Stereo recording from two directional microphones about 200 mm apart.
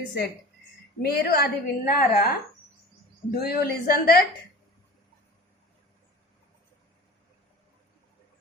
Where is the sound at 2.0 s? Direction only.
50° left (ahead or behind).